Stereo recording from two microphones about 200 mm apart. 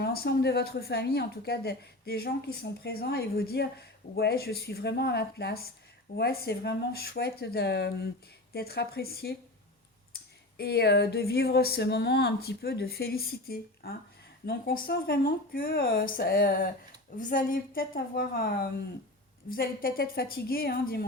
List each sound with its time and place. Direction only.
0.0 s a woman's voice: 50° left (ahead or behind)
10.6 s a woman's voice: 55° left (ahead or behind)